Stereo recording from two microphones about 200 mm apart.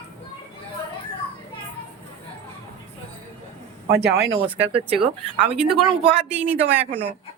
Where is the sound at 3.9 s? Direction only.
55° right (ahead or behind).